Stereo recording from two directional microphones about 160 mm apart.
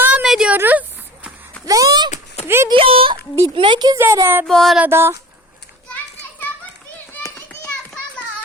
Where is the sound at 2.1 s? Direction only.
45° left (ahead or behind).